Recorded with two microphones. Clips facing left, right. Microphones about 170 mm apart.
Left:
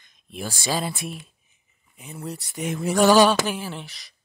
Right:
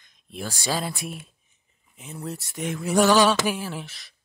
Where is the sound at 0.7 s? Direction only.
5° left (ahead or behind).